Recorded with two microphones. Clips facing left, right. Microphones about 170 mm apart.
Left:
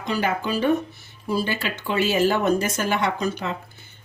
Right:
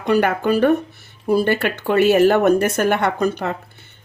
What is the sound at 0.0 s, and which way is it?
Speech, 60° right (ahead or behind).